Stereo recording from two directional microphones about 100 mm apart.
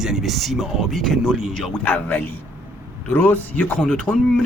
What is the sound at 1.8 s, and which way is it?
Speech, 20° left (ahead or behind).